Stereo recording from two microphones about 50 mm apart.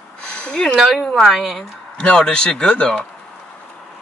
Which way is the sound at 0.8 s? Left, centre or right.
Centre.